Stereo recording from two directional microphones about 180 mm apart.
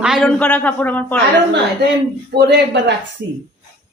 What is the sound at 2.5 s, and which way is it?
Speech, 75° right (ahead or behind).